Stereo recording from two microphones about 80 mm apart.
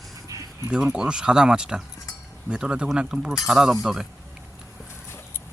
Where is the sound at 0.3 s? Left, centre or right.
Right.